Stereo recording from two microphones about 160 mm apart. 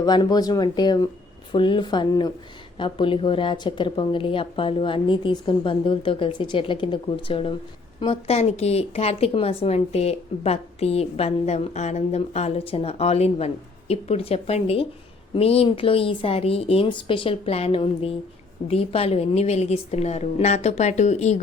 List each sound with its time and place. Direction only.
0.0 s a woman's voice: 25° left (ahead or behind); by 21.3 s 45° left (ahead or behind)